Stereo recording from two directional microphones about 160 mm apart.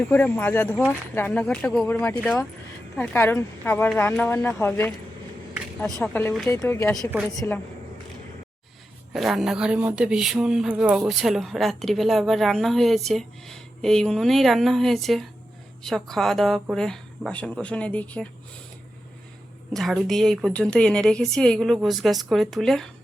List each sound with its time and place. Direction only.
0.1 s speech: 10° left (ahead or behind)
6.0 s speech: 10° left (ahead or behind)
9.1 s speech: centre (ahead or behind)
19.7 s speech: centre (ahead or behind)